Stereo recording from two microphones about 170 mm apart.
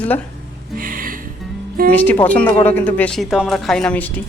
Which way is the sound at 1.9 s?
10° left (ahead or behind).